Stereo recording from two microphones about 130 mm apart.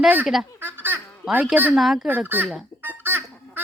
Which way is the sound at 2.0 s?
15° right (ahead or behind).